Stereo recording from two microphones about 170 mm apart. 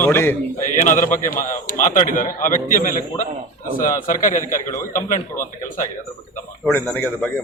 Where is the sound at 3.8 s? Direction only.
50° left (ahead or behind).